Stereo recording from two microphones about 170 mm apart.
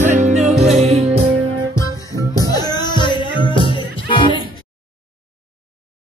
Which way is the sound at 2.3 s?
20° left (ahead or behind).